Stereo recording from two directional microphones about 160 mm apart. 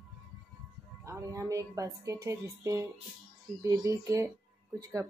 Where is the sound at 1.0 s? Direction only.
20° right (ahead or behind).